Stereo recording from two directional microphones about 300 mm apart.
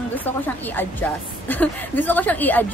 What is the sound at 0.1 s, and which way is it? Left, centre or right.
A woman's voice, centre.